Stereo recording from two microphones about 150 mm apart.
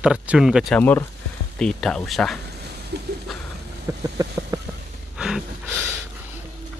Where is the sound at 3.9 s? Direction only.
20° right (ahead or behind).